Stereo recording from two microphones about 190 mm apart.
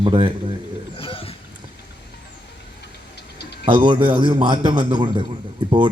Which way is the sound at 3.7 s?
25° right (ahead or behind).